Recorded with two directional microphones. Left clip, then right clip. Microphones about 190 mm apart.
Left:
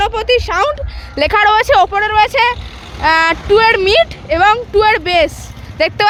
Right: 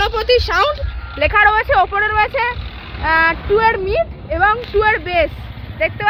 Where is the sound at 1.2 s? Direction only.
45° left (ahead or behind).